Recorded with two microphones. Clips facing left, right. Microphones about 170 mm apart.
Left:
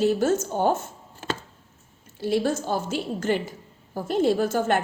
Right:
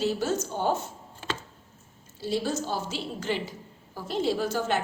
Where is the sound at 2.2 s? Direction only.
60° left (ahead or behind).